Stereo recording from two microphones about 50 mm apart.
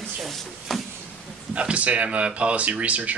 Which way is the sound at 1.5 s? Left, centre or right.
Right.